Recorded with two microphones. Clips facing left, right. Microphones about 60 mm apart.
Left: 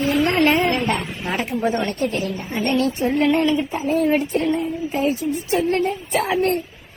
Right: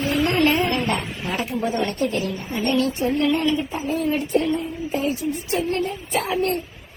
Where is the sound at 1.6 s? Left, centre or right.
Left.